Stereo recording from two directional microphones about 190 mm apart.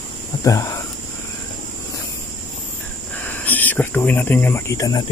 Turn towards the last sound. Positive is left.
turn(degrees=15)  # may be behind; listen again after turning